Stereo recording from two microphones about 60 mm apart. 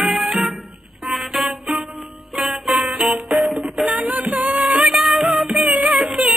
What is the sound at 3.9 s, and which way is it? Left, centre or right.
Music, right.